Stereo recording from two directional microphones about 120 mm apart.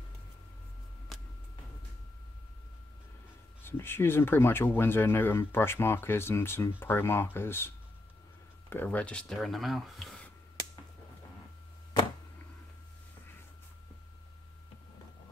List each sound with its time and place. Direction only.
3.6 s speech: 20° left (ahead or behind); by 10.1 s centre (ahead or behind)